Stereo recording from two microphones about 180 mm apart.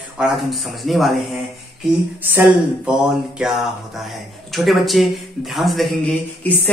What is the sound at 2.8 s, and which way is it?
Speech, 5° right (ahead or behind).